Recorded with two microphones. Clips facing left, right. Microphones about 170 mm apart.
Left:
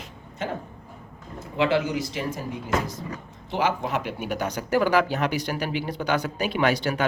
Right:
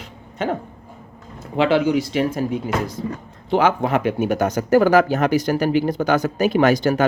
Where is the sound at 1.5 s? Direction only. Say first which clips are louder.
Right 6 dB; 80° right.